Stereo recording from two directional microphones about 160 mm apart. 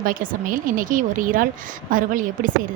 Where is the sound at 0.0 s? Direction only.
60° right (ahead or behind).